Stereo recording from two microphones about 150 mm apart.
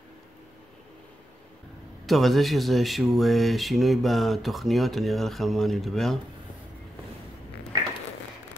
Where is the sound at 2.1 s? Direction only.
Centre (ahead or behind).